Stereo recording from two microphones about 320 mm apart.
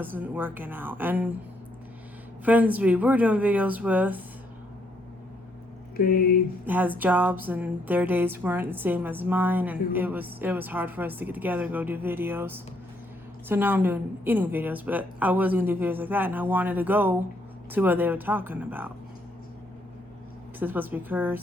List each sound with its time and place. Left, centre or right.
0.0 s speech: centre
2.4 s speech: centre
6.0 s speech: left
6.7 s speech: centre
20.6 s speech: centre